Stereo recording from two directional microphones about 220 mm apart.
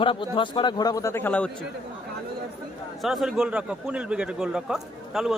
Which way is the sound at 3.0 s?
Centre (ahead or behind).